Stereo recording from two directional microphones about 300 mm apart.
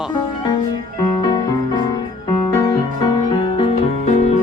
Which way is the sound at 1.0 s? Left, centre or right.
Centre.